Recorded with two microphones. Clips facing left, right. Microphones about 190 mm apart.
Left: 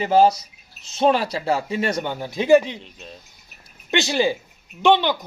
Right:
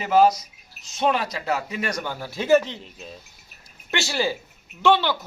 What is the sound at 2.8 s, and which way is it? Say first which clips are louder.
Speech: right 1 dB; centre (ahead or behind).